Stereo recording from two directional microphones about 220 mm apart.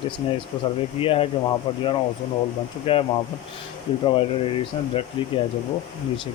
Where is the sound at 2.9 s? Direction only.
25° left (ahead or behind).